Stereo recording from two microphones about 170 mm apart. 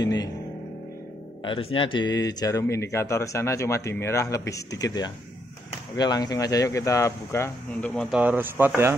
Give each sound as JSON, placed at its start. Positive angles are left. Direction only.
{"t": 0.0, "sound": "speech", "side_deg": 20}
{"t": 1.4, "sound": "speech", "side_deg": 30}
{"t": 7.9, "sound": "speech", "side_deg": 5}
{"t": 8.2, "sound": "speech", "side_deg": -10}